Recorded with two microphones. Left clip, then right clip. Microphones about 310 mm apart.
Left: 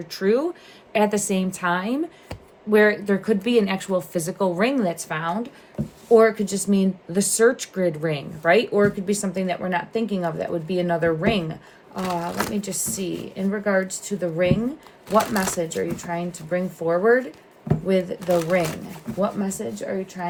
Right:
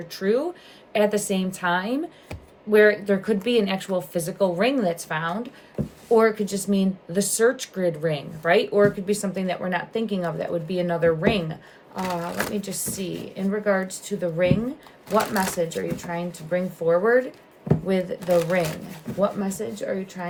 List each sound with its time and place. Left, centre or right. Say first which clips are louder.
0.1 s speech: left 2 dB; left
12.3 s speech: left 1 dB; centre
12.5 s speech: left 2 dB; centre